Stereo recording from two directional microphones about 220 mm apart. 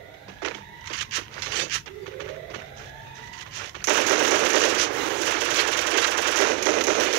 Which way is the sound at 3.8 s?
55° right (ahead or behind).